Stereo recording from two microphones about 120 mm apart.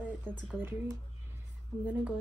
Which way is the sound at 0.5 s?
15° right (ahead or behind).